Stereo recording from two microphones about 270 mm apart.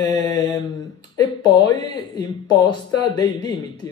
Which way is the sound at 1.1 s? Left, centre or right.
Centre.